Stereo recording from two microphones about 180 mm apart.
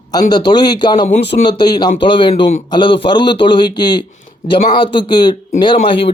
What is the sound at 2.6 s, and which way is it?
A man's voice, 25° left (ahead or behind).